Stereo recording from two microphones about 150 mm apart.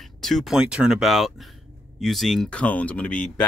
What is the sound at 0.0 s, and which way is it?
Speech, centre (ahead or behind).